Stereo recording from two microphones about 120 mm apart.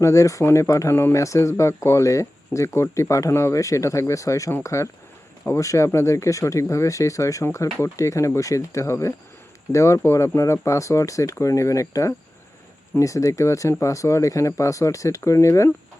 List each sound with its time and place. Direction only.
0.0 s speech: 25° left (ahead or behind)